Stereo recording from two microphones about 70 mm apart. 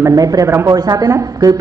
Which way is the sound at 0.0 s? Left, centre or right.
Right.